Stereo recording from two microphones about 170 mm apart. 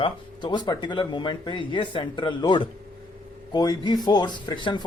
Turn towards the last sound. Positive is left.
turn(degrees=30)  # may be behind; listen again after turning